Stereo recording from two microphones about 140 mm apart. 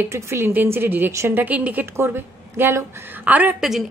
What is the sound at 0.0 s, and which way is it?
A woman's voice, 20° right (ahead or behind).